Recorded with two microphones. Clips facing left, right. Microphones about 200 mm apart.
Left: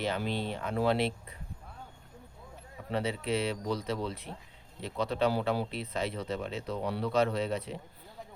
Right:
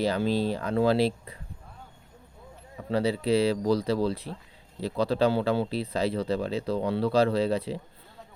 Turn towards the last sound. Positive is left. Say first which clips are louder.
# right 7 dB
turn(degrees=-35)  # may be behind; listen again after turning